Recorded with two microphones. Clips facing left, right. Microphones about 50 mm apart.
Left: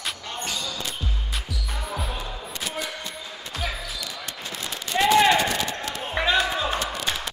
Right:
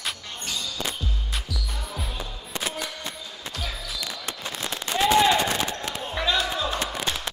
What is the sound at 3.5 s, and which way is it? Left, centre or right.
Basketball bounce, left.